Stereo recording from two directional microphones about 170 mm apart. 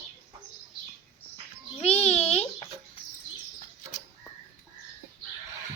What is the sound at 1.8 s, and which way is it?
Babbling, 40° left (ahead or behind).